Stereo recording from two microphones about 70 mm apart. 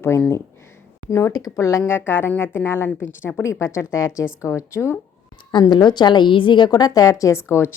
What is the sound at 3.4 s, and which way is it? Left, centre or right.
A woman's voice, left.